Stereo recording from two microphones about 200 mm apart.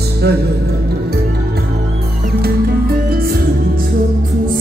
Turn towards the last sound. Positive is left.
turn(degrees=-50)  # may be behind; listen again after turning